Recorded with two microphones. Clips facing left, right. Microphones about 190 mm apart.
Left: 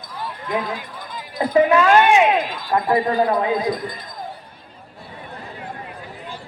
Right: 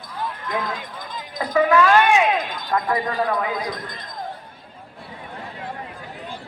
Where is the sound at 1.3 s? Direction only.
30° left (ahead or behind).